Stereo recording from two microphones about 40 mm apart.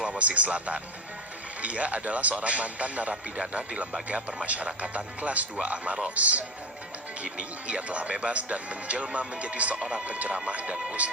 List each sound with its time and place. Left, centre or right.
0.2 s speech: right
7.3 s speech: right
9.7 s speech: centre
10.1 s speech: right